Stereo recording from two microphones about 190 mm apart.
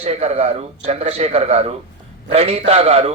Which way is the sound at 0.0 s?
35° right (ahead or behind).